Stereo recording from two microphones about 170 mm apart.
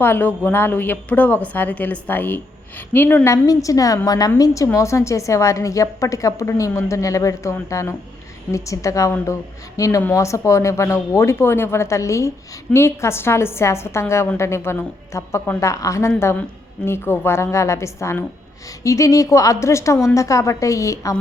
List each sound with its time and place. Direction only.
0.0 s a woman's voice: 10° left (ahead or behind)